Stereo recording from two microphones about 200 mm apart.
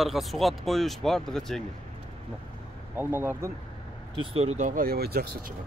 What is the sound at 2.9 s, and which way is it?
Speech, 10° right (ahead or behind).